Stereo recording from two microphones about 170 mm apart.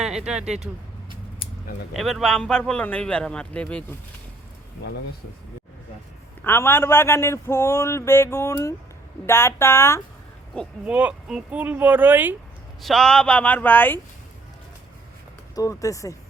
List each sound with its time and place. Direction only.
0.0 s speech: 5° right (ahead or behind)
1.9 s speech: centre (ahead or behind)
6.4 s speech: 15° left (ahead or behind)
10.8 s speech: 5° right (ahead or behind)
12.8 s speech: centre (ahead or behind)
15.5 s speech: 20° left (ahead or behind)